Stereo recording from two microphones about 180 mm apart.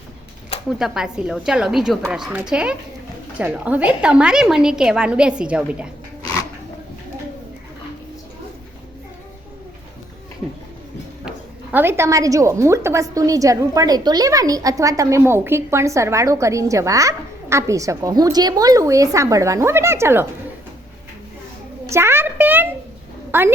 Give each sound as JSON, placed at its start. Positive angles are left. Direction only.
{"t": 0.8, "sound": "a woman's voice", "side_deg": -5}
{"t": 11.3, "sound": "speech", "side_deg": -10}
{"t": 21.8, "sound": "speech", "side_deg": -15}